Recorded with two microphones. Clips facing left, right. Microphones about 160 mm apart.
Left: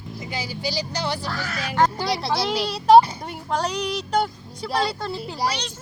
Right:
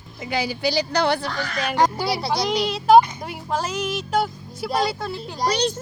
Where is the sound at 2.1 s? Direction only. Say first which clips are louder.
Right 1 dB; centre (ahead or behind).